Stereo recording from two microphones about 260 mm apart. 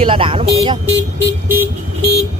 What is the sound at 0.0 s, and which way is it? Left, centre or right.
Speech, centre.